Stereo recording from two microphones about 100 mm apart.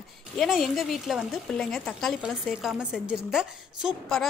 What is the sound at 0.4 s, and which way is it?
Speech, centre (ahead or behind).